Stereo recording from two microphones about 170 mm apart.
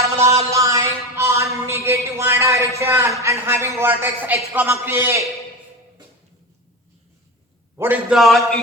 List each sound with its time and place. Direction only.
0.0 s music: 15° right (ahead or behind)
0.5 s a sound: 15° right (ahead or behind)
2.7 s a man's voice: 15° right (ahead or behind)
7.8 s a man's voice: 15° right (ahead or behind)
8.1 s speech: centre (ahead or behind)